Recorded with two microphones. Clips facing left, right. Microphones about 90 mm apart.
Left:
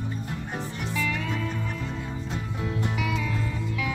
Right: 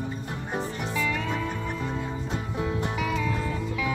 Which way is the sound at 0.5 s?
40° right (ahead or behind).